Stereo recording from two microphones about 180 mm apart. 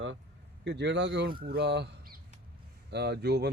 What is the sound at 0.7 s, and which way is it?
Speech, 75° right (ahead or behind).